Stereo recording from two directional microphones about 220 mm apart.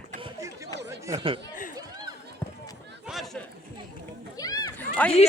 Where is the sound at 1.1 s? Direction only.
25° right (ahead or behind).